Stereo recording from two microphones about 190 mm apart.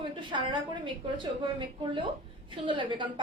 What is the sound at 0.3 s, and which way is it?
A woman's voice, 25° right (ahead or behind).